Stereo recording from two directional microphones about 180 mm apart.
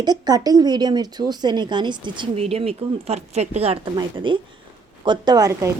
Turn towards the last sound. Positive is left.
turn(degrees=-15)  # may be behind; listen again after turning